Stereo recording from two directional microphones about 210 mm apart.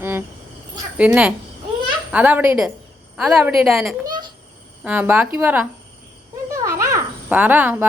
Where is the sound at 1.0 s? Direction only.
5° right (ahead or behind).